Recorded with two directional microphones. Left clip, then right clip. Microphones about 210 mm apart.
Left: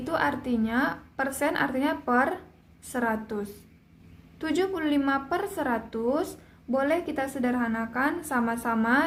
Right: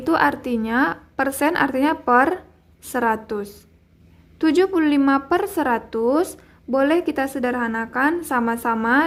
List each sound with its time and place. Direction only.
0.0 s a woman's voice: 35° right (ahead or behind)